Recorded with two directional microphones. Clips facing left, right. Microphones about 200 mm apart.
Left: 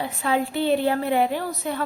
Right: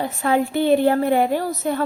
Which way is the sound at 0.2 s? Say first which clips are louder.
Right 4 dB; 50° right (ahead or behind).